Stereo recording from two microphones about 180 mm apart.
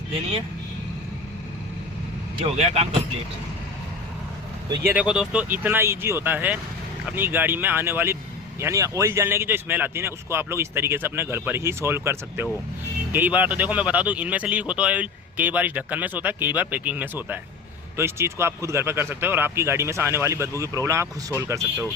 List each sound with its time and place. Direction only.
2.4 s speech: 35° right (ahead or behind)
4.8 s speech: 10° right (ahead or behind)